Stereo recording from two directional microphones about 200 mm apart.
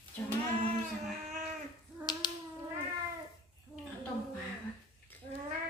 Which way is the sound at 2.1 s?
20° left (ahead or behind).